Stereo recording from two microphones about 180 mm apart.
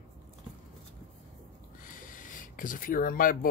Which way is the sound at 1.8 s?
50° left (ahead or behind).